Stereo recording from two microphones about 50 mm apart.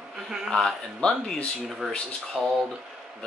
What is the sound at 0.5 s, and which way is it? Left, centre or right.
Speech, centre.